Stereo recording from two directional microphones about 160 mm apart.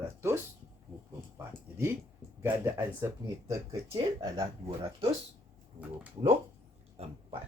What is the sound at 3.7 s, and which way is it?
Speech, 35° right (ahead or behind).